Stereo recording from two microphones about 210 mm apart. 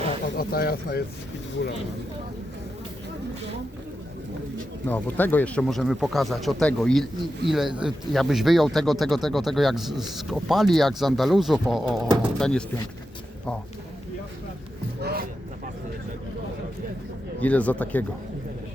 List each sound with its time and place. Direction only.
0.3 s speech: 45° left (ahead or behind)
4.9 s speech: 10° left (ahead or behind)
15.0 s speech: 45° right (ahead or behind)
17.4 s speech: 5° left (ahead or behind)